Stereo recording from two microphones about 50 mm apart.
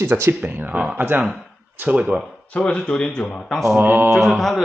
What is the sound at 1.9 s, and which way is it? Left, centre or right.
Speech, right.